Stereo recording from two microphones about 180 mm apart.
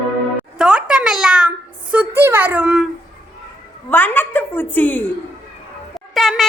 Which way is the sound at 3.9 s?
10° left (ahead or behind).